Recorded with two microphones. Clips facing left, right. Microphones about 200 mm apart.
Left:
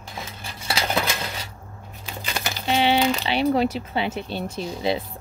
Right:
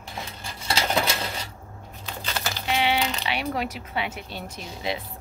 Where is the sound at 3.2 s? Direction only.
30° left (ahead or behind).